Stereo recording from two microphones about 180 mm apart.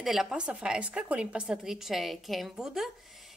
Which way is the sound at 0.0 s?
Centre (ahead or behind).